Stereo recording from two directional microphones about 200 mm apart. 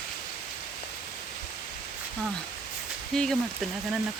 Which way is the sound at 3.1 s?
Centre (ahead or behind).